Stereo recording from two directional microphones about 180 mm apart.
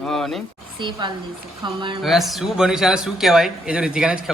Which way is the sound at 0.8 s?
25° right (ahead or behind).